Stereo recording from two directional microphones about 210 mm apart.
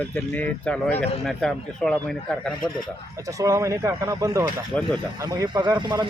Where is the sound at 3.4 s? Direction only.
15° right (ahead or behind).